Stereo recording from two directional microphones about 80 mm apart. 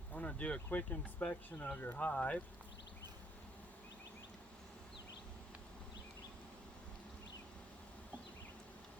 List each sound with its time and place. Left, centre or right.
0.1 s speech: centre